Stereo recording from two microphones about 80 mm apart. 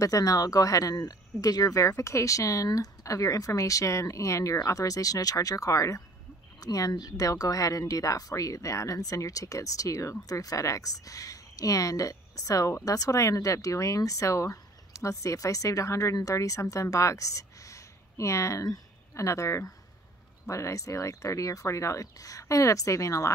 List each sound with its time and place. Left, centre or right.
0.0 s speech: left